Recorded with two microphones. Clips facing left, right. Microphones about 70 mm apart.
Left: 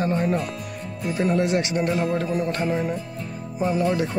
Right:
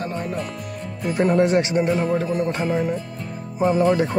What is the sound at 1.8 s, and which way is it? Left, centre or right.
Speech, centre.